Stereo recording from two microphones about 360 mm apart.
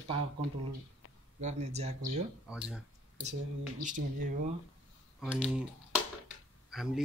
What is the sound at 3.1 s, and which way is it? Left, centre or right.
Speech, centre.